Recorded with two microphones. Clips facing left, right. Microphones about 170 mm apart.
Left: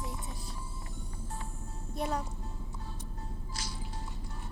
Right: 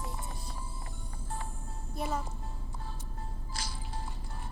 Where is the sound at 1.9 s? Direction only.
Centre (ahead or behind).